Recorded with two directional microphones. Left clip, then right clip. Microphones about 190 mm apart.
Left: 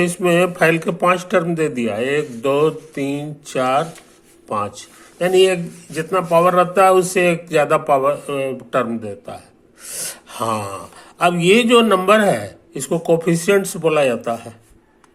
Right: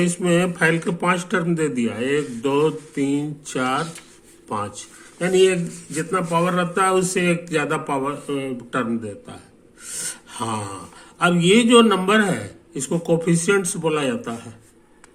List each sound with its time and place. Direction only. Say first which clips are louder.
0.0 s speech: left 5 dB; 20° left (ahead or behind)